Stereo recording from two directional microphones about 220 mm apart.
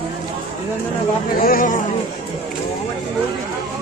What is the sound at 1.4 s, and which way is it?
Speech, 40° left (ahead or behind).